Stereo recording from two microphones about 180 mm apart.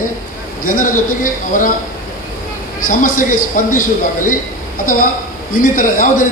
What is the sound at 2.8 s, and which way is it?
A man's voice, 50° left (ahead or behind).